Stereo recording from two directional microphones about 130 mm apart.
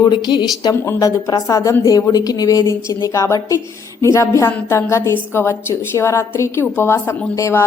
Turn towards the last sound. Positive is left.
turn(degrees=20)  # may be behind; listen again after turning